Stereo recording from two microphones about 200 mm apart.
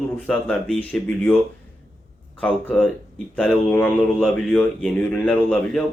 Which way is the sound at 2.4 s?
5° left (ahead or behind).